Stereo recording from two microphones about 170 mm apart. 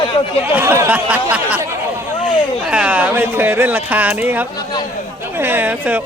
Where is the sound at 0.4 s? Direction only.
10° right (ahead or behind).